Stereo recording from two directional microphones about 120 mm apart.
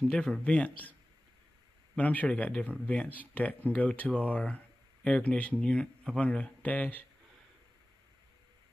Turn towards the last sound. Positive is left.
turn(degrees=15)  # may be behind; listen again after turning